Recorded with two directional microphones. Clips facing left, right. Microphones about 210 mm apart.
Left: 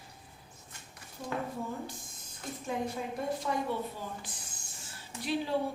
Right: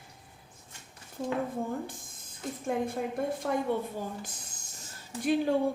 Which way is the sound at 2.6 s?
50° right (ahead or behind).